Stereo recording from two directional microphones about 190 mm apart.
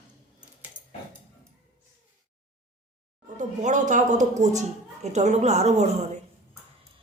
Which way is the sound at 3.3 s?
40° right (ahead or behind).